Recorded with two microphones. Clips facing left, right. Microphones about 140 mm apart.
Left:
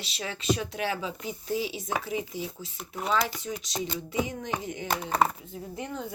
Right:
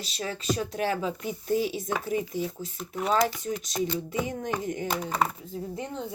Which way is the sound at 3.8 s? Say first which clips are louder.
Right 1 dB; 20° left (ahead or behind).